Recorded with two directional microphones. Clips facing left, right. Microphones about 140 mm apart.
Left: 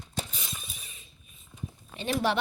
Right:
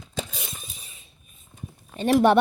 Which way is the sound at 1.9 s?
55° right (ahead or behind).